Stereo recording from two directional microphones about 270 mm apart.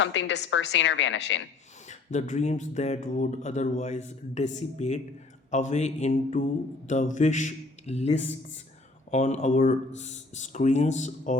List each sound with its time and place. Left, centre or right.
0.0 s a woman's voice: left
1.9 s speech: left